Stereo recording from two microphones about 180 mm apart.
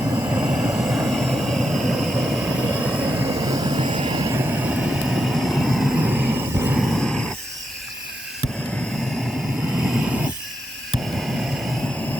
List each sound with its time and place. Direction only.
0.0 s vehicle: 20° right (ahead or behind)
6.7 s a sound: centre (ahead or behind)
9.7 s vehicle: 5° right (ahead or behind)